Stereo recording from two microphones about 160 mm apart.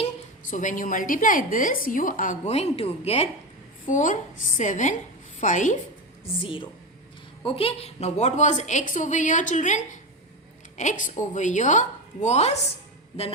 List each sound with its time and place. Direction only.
0.5 s a woman's voice: 55° left (ahead or behind)
3.8 s a woman's voice: 55° left (ahead or behind)
6.4 s a woman's voice: 35° left (ahead or behind)